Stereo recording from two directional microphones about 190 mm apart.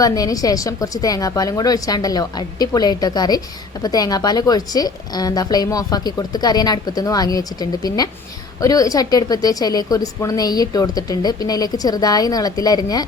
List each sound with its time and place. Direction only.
0.0 s a woman's voice: 20° left (ahead or behind)